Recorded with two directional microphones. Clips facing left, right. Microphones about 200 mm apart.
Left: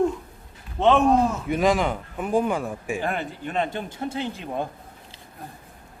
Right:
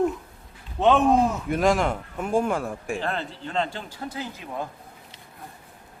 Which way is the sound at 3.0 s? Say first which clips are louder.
Left 2 dB; 15° left (ahead or behind).